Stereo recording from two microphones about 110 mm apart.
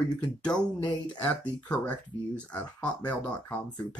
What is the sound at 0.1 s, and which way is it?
Speech, 10° left (ahead or behind).